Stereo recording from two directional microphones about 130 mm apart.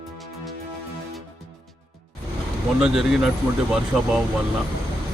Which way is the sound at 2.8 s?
5° right (ahead or behind).